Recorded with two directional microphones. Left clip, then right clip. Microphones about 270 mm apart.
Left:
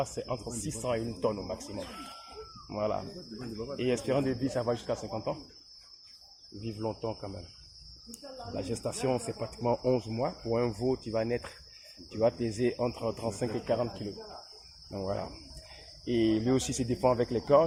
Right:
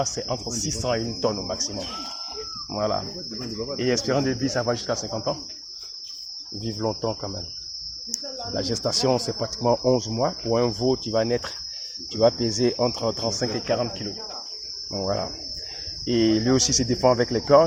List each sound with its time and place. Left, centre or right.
0.0 s speech: right
6.7 s speech: right; by 13.8 s centre
14.9 s speech: centre